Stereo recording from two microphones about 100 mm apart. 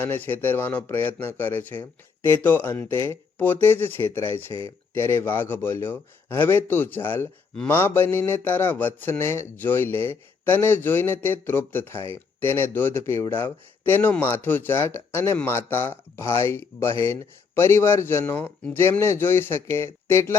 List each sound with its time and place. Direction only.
0.0 s speech: 20° left (ahead or behind)